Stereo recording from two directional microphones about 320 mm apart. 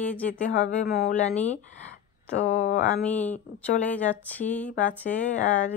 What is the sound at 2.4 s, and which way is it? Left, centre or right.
Speech, left.